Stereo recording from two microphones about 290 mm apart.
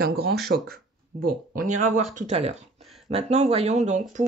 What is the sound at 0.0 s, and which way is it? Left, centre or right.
Speech, right.